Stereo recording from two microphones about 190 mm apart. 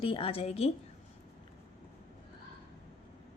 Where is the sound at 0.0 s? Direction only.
25° left (ahead or behind).